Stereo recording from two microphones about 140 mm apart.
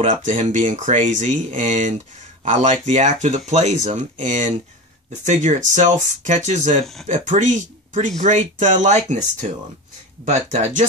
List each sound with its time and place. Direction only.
0.0 s speech: 65° right (ahead or behind)